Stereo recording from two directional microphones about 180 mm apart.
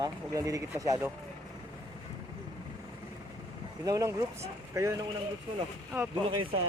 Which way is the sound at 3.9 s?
20° right (ahead or behind).